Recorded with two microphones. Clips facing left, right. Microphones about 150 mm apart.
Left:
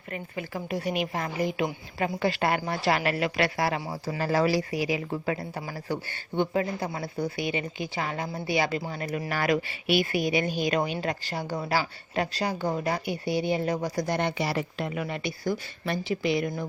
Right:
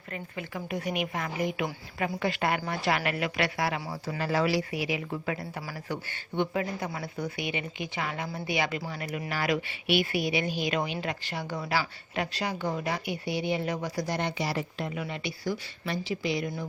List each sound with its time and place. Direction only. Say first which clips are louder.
0.3 s speech: left 3 dB; 35° left (ahead or behind); by 15.0 s 65° left (ahead or behind)
15.0 s speech: left 3 dB; 45° left (ahead or behind)